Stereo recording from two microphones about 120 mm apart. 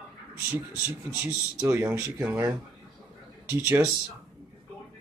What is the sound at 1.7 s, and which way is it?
Speech, 20° right (ahead or behind).